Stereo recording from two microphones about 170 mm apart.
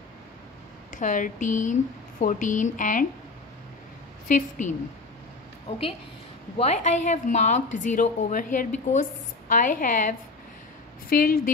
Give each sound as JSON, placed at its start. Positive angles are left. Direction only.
{"t": 0.9, "sound": "speech", "side_deg": 50}
{"t": 4.3, "sound": "speech", "side_deg": 45}
{"t": 6.6, "sound": "speech", "side_deg": 40}